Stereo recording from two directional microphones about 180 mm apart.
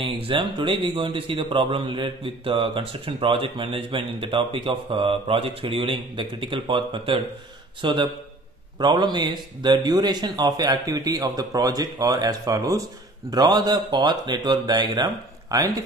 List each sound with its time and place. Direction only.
0.0 s a man's voice: 30° right (ahead or behind)